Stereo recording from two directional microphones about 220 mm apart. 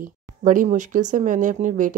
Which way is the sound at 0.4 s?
35° right (ahead or behind).